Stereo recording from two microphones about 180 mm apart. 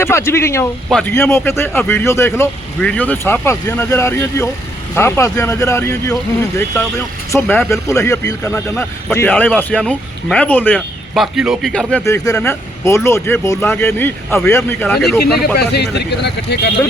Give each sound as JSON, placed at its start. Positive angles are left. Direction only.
{"t": 0.0, "sound": "speech", "side_deg": 15}
{"t": 0.9, "sound": "speech", "side_deg": 0}
{"t": 1.1, "sound": "speech", "side_deg": 15}
{"t": 10.8, "sound": "speech", "side_deg": 0}
{"t": 12.0, "sound": "speech", "side_deg": 15}
{"t": 15.4, "sound": "speech", "side_deg": 65}